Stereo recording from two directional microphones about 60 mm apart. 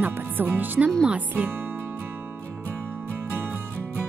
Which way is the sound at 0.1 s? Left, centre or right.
Right.